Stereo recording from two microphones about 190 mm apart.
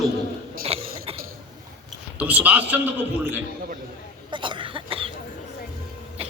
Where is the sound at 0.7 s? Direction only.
30° right (ahead or behind).